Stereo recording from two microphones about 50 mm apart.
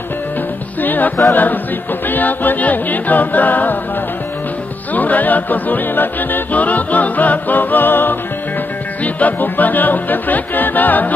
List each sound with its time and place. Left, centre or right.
0.7 s music: left
4.9 s music: left